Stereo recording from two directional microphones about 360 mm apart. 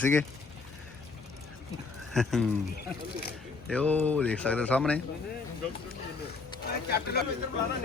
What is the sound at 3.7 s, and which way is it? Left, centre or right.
Speech, centre.